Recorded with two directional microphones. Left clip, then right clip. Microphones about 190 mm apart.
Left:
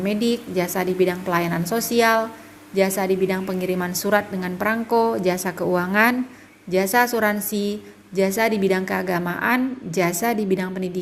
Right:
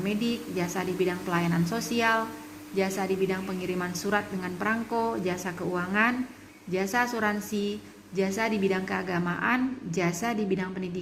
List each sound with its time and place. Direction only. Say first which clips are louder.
0.0 s a woman's voice: left 8 dB; 35° left (ahead or behind)